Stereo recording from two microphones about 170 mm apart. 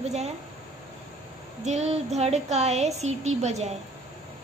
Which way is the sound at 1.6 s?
40° right (ahead or behind).